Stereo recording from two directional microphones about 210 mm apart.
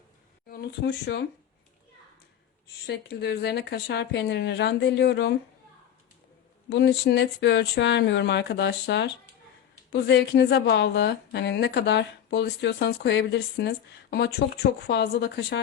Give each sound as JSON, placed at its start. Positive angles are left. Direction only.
{"t": 0.4, "sound": "speech", "side_deg": 45}
{"t": 2.8, "sound": "a woman's voice", "side_deg": 50}
{"t": 6.7, "sound": "a woman's voice", "side_deg": 55}